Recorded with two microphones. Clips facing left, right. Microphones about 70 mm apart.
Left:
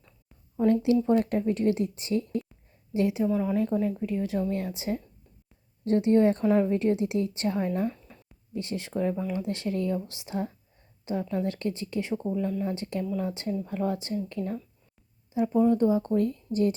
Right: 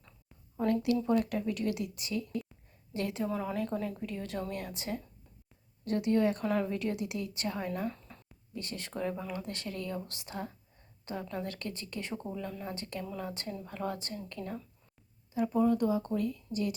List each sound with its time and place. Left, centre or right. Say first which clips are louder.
0.6 s speech: left 7 dB; left
2.9 s speech: left 8 dB; centre
3.2 s a woman's voice: left 8 dB; centre; by 7.9 s left
7.9 s a sound: left 5 dB; centre
8.5 s speech: left 8 dB; left
12.6 s speech: left 8 dB; left
15.3 s speech: left 5 dB; centre
15.8 s speech: left 7 dB; left